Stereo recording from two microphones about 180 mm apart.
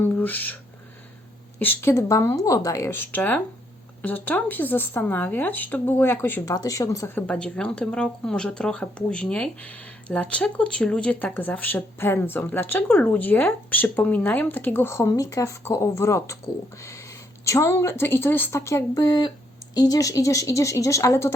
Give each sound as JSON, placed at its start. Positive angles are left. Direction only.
{"t": 0.0, "sound": "speech", "side_deg": 10}